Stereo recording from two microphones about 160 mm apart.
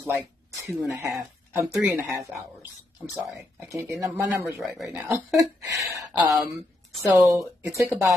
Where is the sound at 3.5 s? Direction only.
15° right (ahead or behind).